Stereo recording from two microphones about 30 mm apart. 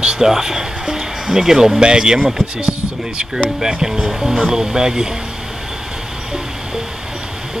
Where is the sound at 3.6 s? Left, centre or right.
Right.